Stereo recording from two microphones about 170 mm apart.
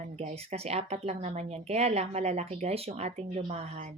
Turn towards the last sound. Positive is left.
turn(degrees=-40)  # may be behind; listen again after turning